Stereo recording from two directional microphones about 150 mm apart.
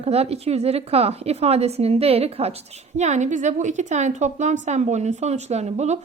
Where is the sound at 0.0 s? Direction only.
45° right (ahead or behind).